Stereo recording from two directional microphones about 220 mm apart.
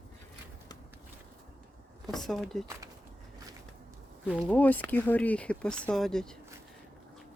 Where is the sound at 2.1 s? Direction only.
Centre (ahead or behind).